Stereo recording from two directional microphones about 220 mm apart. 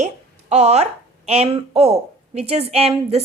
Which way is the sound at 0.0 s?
30° right (ahead or behind).